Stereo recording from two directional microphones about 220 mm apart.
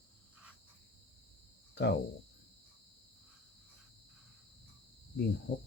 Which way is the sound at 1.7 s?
50° left (ahead or behind).